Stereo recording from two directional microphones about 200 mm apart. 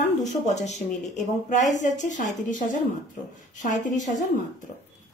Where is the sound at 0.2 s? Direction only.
35° left (ahead or behind).